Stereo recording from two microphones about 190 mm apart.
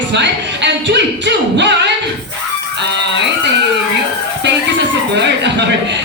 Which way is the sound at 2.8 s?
65° right (ahead or behind).